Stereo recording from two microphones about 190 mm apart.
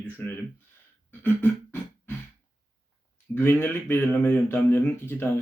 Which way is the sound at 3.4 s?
10° left (ahead or behind).